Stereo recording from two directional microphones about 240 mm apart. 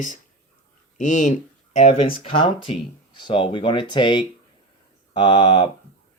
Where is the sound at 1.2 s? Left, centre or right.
Left.